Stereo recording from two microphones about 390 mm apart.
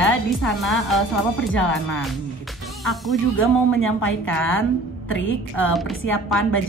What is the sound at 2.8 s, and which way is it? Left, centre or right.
Speech, centre.